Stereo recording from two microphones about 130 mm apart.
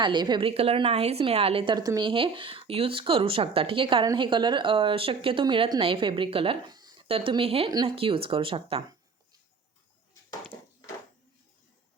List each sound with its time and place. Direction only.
0.0 s a woman's voice: 35° right (ahead or behind)
6.7 s a sound: 30° right (ahead or behind)
7.1 s speech: 45° right (ahead or behind)
7.7 s a woman's voice: 30° right (ahead or behind)
7.9 s speech: 45° right (ahead or behind)